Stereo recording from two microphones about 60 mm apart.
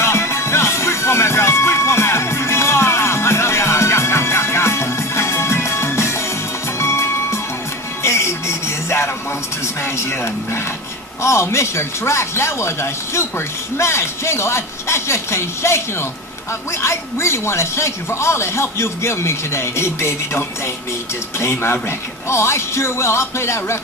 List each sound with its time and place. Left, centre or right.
0.0 s music: left
9.8 s television: left
11.2 s speech: left